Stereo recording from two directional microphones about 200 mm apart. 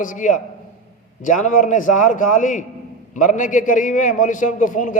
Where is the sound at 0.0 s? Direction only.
40° left (ahead or behind).